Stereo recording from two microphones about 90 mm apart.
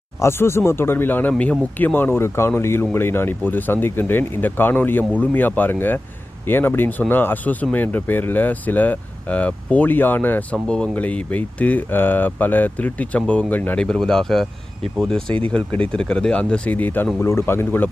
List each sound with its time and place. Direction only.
0.2 s speech: 30° left (ahead or behind)
13.8 s speech: 5° left (ahead or behind)
15.4 s speech: 20° left (ahead or behind)